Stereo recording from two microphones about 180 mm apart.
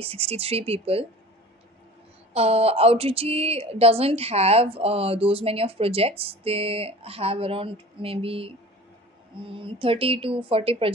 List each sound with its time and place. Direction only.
0.0 s a woman's voice: 30° right (ahead or behind)
2.3 s a woman's voice: 35° right (ahead or behind)